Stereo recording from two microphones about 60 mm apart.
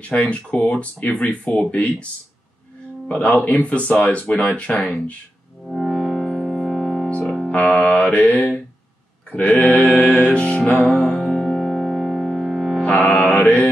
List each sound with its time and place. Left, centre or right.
0.1 s speech: left
3.1 s speech: left
4.7 s speech: centre
5.7 s music: centre
7.2 s music: centre
7.5 s music: centre
7.8 s speech: left
10.0 s music: centre
10.8 s music: centre
12.8 s mantra: left